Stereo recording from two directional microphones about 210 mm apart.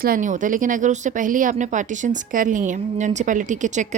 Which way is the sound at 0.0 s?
40° right (ahead or behind).